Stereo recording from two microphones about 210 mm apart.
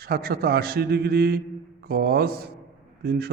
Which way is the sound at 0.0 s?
45° right (ahead or behind).